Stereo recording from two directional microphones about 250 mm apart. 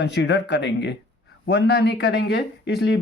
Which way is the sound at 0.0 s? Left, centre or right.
Left.